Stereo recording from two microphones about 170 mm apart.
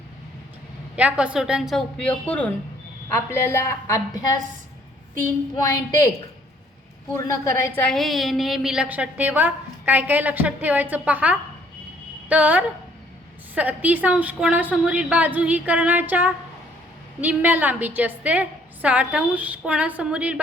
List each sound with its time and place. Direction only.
0.9 s a woman's voice: 5° right (ahead or behind); by 4.4 s 20° left (ahead or behind)
5.6 s a woman's voice: 20° left (ahead or behind)
7.4 s a woman's voice: 15° left (ahead or behind)
7.9 s a woman's voice: centre (ahead or behind)